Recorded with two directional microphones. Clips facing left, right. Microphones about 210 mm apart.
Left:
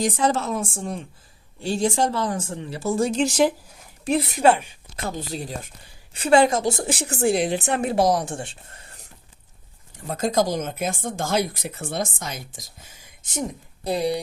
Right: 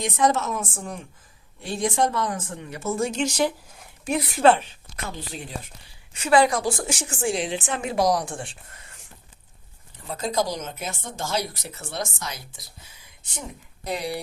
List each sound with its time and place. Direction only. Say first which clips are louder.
0.0 s speech: left 1 dB; 30° left (ahead or behind)
4.4 s speech: right 2 dB; 10° left (ahead or behind)
4.9 s speech: left 5 dB; 40° left (ahead or behind)
6.1 s speech: left 2 dB; 30° left (ahead or behind)
6.9 s speech: left 5 dB; 35° left (ahead or behind)
7.5 s a woman's voice: left 5 dB; 60° left (ahead or behind)
7.9 s speech: even; 25° left (ahead or behind)
9.9 s speech: left 4 dB; 45° left (ahead or behind)
13.8 s speech: left 6 dB; 30° left (ahead or behind)